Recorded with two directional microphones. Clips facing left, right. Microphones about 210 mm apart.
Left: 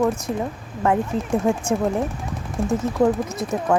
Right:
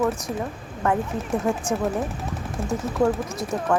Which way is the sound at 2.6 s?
25° left (ahead or behind).